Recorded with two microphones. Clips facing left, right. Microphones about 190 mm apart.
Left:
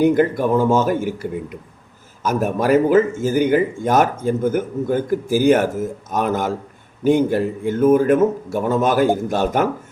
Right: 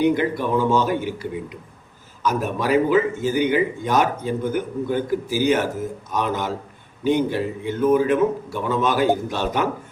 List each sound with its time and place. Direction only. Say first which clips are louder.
0.0 s speech: left 4 dB; 45° left (ahead or behind)